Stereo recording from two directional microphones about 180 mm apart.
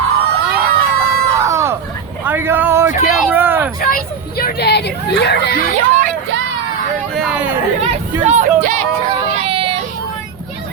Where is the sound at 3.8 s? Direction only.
50° left (ahead or behind); by 5.5 s 70° left (ahead or behind).